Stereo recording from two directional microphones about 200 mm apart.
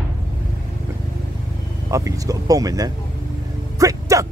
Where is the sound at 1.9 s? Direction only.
15° right (ahead or behind).